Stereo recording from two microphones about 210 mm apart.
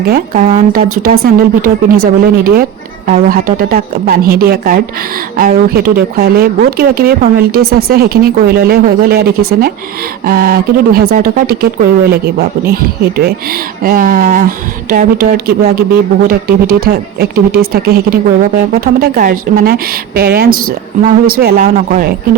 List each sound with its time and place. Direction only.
0.3 s speech: 35° right (ahead or behind)